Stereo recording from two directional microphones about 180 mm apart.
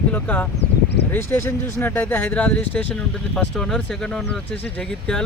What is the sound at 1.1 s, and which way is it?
Speech, 15° left (ahead or behind).